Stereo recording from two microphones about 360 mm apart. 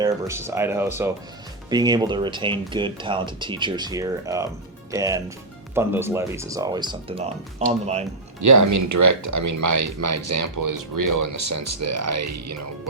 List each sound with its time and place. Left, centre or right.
0.0 s speech: centre
8.4 s speech: right